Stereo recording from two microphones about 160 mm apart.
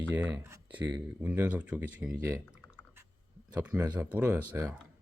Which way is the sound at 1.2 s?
10° right (ahead or behind).